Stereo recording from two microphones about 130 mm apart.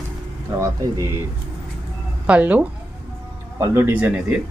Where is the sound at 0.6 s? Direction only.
25° right (ahead or behind).